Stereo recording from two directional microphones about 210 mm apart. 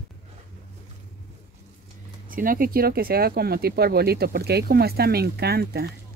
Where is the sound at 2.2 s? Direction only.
40° right (ahead or behind).